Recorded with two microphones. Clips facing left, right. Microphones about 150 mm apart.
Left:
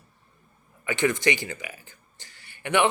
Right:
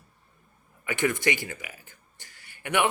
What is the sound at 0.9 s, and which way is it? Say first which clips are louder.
Speech: left 2 dB; 20° left (ahead or behind).